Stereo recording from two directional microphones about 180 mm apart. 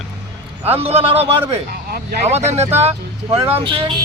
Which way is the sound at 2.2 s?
35° right (ahead or behind).